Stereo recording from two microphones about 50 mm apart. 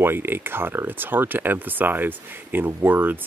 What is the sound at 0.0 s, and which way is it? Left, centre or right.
Speech, right.